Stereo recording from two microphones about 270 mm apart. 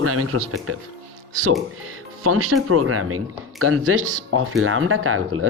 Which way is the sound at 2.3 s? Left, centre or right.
Right.